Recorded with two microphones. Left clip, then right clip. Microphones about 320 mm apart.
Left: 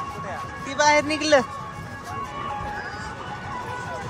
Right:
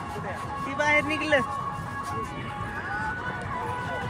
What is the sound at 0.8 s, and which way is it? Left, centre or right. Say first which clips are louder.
Speech: left 5 dB; left.